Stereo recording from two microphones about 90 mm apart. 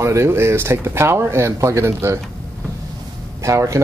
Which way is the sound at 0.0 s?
30° right (ahead or behind).